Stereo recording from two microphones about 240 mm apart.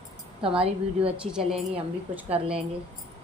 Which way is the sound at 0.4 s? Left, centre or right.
Right.